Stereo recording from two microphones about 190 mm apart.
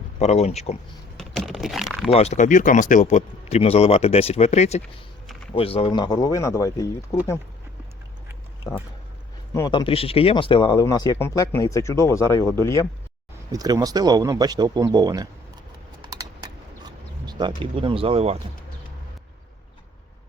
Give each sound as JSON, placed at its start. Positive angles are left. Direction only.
{"t": 0.2, "sound": "speech", "side_deg": 35}
{"t": 1.1, "sound": "computer keyboard", "side_deg": 0}
{"t": 2.1, "sound": "speech", "side_deg": 35}
{"t": 9.6, "sound": "speech", "side_deg": 20}
{"t": 13.5, "sound": "speech", "side_deg": -20}
{"t": 16.0, "sound": "a sound", "side_deg": -20}